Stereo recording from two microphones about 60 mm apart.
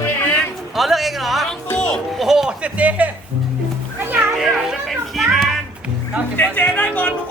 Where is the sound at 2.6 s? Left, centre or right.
Right.